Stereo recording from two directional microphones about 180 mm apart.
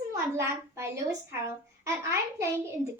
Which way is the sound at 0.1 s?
15° right (ahead or behind).